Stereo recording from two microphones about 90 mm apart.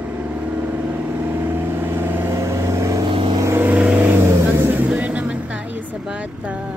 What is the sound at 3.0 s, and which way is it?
Vehicle, 70° right (ahead or behind).